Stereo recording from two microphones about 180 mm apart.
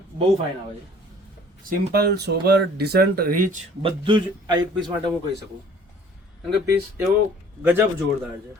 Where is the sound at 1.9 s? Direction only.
65° right (ahead or behind).